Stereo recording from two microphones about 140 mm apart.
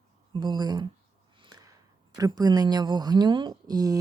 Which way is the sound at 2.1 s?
25° right (ahead or behind).